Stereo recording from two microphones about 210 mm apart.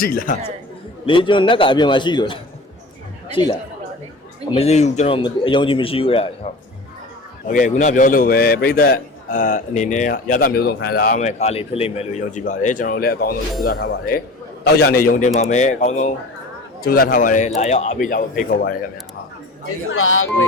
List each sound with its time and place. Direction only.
0.0 s a man's voice: 45° left (ahead or behind)
1.0 s speech: 25° left (ahead or behind)
4.5 s speech: 30° left (ahead or behind)
7.4 s a man's voice: 40° left (ahead or behind)
19.9 s speech: 75° left (ahead or behind)